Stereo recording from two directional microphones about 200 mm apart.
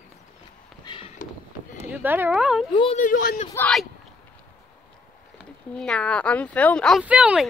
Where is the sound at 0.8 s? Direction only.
25° left (ahead or behind).